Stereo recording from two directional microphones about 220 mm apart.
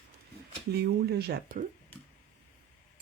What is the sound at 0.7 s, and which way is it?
Speech, 45° right (ahead or behind).